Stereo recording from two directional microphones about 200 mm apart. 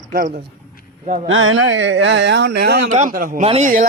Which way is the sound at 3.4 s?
35° right (ahead or behind).